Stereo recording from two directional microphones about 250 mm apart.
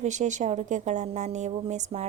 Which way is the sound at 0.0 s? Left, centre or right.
Right.